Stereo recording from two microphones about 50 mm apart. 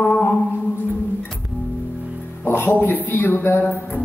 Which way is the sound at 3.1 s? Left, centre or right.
Left.